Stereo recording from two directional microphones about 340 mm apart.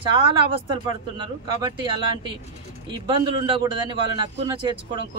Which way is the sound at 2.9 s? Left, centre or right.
Centre.